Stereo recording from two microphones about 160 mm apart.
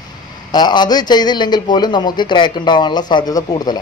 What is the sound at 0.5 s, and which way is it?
A man's voice, 25° left (ahead or behind).